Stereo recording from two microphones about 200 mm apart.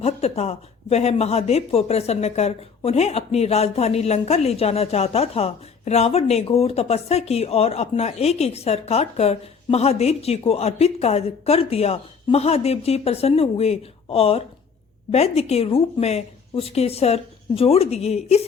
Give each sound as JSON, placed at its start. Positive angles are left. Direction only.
{"t": 0.0, "sound": "speech", "side_deg": 30}